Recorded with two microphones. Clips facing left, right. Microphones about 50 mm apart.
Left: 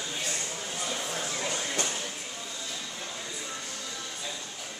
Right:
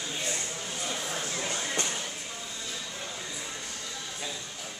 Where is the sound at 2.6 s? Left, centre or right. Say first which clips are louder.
Even; centre.